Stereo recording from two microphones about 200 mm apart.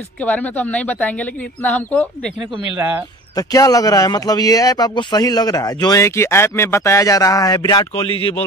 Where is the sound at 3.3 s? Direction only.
15° left (ahead or behind).